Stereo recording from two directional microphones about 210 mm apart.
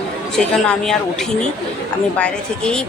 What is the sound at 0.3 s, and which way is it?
A woman's voice, 5° left (ahead or behind).